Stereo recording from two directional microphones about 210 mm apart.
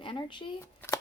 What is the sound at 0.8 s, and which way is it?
Shuffling cards, 10° left (ahead or behind).